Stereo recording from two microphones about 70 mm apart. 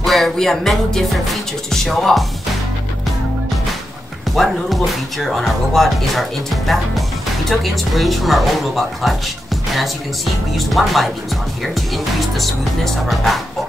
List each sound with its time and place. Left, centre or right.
0.0 s speech: centre
4.4 s speech: centre
10.5 s speech: centre